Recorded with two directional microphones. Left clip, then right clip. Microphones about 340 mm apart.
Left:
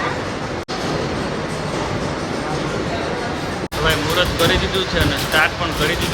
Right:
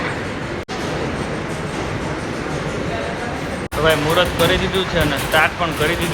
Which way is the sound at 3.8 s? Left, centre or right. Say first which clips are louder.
Right 2 dB; centre.